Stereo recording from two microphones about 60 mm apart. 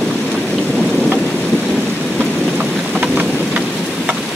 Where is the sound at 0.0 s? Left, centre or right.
Centre.